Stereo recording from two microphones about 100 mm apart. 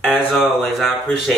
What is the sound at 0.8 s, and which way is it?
Speech, centre (ahead or behind).